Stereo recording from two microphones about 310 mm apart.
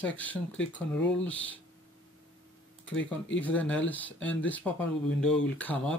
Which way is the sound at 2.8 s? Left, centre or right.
Left.